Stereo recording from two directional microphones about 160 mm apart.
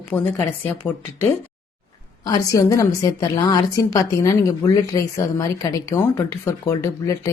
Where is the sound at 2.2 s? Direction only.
25° left (ahead or behind).